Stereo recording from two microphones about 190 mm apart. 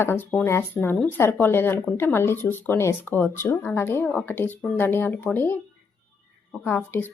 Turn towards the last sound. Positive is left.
turn(degrees=10)  # may be behind; listen again after turning